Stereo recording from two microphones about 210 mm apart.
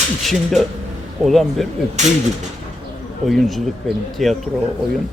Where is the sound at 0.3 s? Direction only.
Centre (ahead or behind).